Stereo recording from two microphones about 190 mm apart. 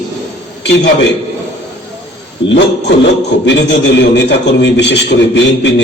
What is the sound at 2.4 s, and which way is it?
A man's voice, 70° left (ahead or behind).